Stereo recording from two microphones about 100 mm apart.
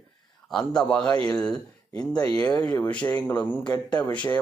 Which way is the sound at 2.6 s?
15° left (ahead or behind).